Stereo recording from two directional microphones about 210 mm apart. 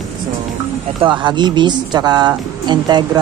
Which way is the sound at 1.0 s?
20° right (ahead or behind).